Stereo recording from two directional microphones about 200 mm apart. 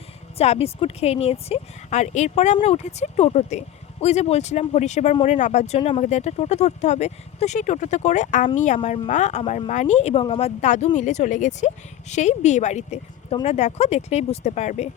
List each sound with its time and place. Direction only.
0.3 s speech: 30° left (ahead or behind)